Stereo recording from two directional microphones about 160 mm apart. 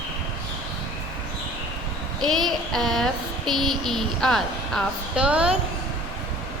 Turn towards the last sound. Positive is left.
turn(degrees=-5)  # may be behind; listen again after turning